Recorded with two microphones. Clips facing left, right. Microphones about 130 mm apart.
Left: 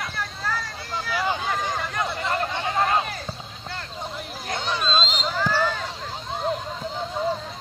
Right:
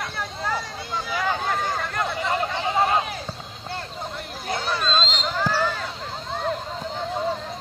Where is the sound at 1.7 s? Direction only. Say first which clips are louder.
Right 1 dB; centre (ahead or behind).